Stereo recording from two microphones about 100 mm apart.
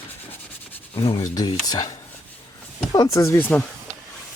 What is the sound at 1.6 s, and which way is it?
Speech, 40° left (ahead or behind).